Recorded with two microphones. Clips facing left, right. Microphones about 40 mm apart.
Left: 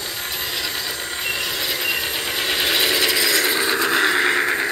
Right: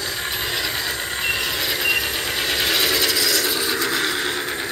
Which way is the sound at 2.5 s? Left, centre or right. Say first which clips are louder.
Left 1 dB; centre.